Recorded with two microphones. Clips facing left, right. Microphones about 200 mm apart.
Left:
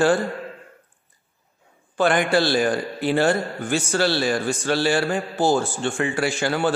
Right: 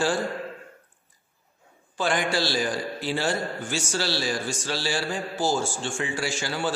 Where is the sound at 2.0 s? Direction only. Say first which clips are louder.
Left 6 dB; 60° left (ahead or behind).